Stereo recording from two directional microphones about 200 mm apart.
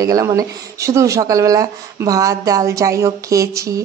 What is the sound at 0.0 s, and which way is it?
Speech, 15° right (ahead or behind).